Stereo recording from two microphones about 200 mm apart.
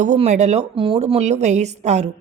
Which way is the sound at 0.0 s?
35° right (ahead or behind).